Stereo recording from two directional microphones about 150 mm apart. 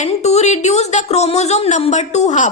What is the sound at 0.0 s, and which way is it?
A woman's voice, 45° left (ahead or behind).